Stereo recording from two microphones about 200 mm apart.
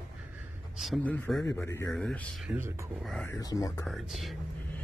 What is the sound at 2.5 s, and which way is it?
Speech, 15° right (ahead or behind).